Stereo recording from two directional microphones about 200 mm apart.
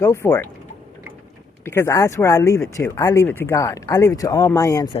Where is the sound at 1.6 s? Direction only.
15° left (ahead or behind).